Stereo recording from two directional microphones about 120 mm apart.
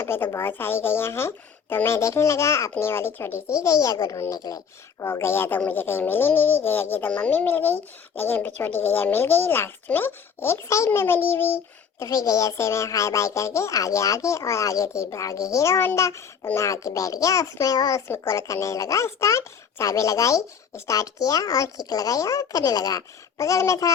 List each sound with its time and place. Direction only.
0.0 s speech: 20° left (ahead or behind)
12.0 s speech: 30° left (ahead or behind)